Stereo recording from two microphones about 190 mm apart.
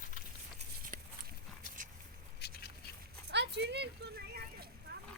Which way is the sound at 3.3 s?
60° right (ahead or behind).